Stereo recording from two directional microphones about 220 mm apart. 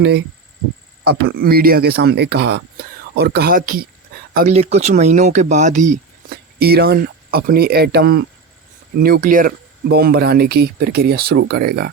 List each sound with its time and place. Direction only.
1.0 s speech: 45° right (ahead or behind)
4.4 s speech: 30° right (ahead or behind); by 11.9 s 50° right (ahead or behind)